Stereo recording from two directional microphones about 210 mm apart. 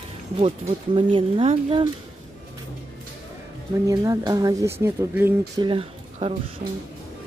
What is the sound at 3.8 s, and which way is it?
Speech, 15° right (ahead or behind).